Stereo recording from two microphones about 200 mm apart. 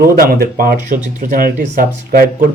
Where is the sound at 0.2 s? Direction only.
50° right (ahead or behind).